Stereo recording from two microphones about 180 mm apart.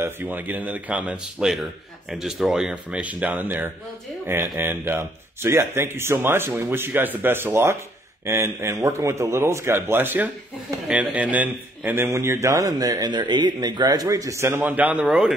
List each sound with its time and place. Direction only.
0.0 s a man's voice: 10° right (ahead or behind)